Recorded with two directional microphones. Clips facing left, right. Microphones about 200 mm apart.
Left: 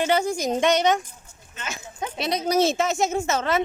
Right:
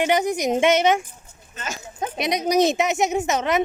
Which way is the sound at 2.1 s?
15° right (ahead or behind).